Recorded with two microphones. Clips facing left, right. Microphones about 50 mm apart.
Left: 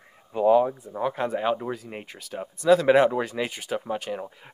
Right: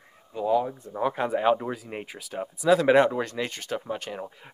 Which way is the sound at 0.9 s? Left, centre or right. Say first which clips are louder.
Right 4 dB; centre.